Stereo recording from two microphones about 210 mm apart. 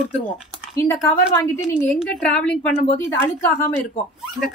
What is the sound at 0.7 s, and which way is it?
Speech, 15° left (ahead or behind).